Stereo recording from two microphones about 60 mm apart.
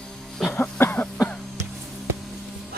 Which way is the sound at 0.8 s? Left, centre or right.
Left.